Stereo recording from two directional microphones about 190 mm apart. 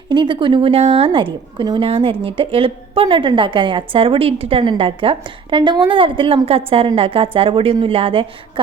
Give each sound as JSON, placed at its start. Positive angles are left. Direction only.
{"t": 0.1, "sound": "a woman's voice", "side_deg": -25}